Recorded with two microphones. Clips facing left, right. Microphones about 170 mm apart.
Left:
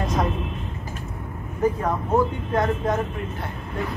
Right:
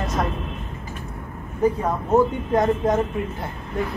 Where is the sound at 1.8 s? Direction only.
20° right (ahead or behind).